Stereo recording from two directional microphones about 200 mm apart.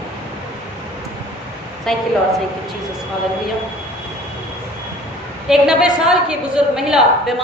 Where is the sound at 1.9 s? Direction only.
Centre (ahead or behind).